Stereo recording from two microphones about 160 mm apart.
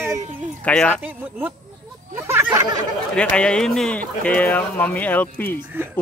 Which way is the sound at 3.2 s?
5° left (ahead or behind).